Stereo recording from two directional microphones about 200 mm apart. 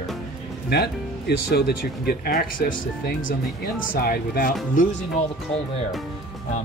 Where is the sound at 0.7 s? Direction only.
55° left (ahead or behind).